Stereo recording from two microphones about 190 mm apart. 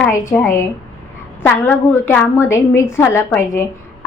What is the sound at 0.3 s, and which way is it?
A woman's voice, 15° left (ahead or behind).